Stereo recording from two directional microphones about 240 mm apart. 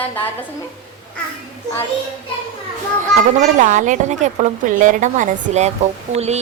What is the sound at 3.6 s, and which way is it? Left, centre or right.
A woman's voice, right.